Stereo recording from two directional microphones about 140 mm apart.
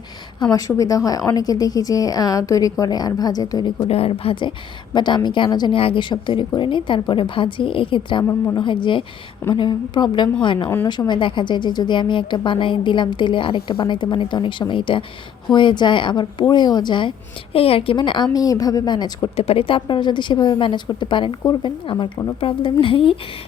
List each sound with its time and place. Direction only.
0.5 s a woman's voice: 25° left (ahead or behind)
3.8 s a woman's voice: 45° left (ahead or behind)
8.2 s a woman's voice: 20° left (ahead or behind)
8.5 s a woman's voice: 35° left (ahead or behind)
19.4 s a woman's voice: 40° left (ahead or behind)